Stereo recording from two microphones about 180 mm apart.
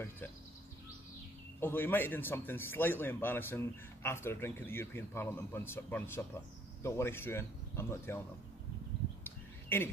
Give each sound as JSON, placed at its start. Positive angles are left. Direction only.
{"t": 1.6, "sound": "a man's voice", "side_deg": 10}
{"t": 9.2, "sound": "bird", "side_deg": 10}